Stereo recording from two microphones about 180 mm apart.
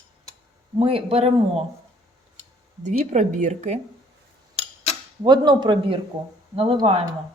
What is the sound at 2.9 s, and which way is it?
Speech, 40° right (ahead or behind).